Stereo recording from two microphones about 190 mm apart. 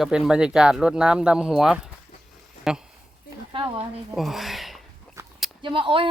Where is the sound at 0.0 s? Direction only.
5° right (ahead or behind).